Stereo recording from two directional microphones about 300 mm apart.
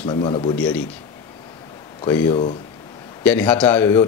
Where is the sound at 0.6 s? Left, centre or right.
Centre.